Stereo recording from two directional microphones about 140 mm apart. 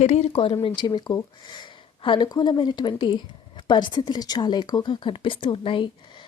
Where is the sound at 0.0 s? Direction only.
50° left (ahead or behind).